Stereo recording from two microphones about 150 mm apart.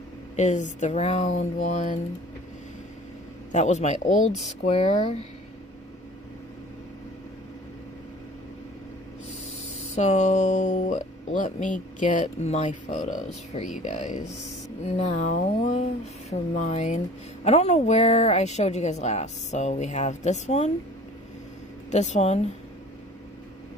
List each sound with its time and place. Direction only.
0.4 s speech: 55° left (ahead or behind)
3.5 s speech: 50° left (ahead or behind)
9.9 s speech: 50° left (ahead or behind)
21.9 s speech: 50° left (ahead or behind)